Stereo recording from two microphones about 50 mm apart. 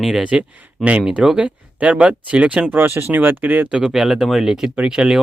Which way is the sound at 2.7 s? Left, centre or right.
Right.